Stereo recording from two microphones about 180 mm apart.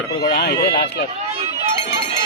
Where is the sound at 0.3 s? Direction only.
65° left (ahead or behind).